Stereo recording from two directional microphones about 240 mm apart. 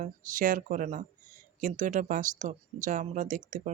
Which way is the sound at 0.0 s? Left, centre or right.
Right.